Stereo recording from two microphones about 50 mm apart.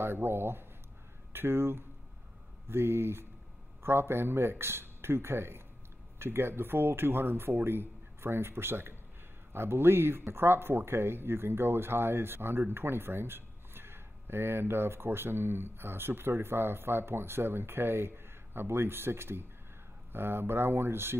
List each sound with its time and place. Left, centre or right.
0.0 s speech: right